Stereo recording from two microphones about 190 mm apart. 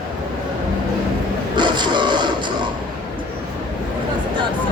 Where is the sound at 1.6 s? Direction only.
25° right (ahead or behind).